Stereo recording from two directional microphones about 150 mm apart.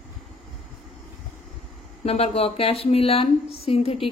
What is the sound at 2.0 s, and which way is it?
A woman's voice, 45° left (ahead or behind).